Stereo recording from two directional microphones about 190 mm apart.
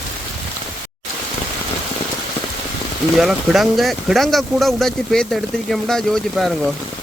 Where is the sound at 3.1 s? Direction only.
Centre (ahead or behind).